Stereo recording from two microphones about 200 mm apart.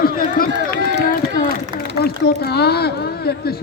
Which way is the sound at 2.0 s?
55° left (ahead or behind).